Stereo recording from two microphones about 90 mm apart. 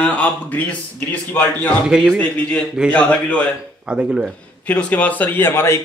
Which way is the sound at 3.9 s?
10° right (ahead or behind).